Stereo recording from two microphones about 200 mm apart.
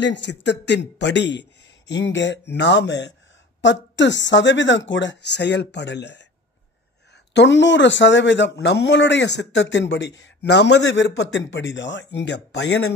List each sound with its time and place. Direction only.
0.0 s a man's voice: 60° left (ahead or behind)
7.3 s a man's voice: 65° left (ahead or behind)